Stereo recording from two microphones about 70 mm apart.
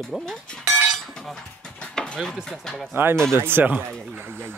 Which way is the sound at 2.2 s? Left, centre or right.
Centre.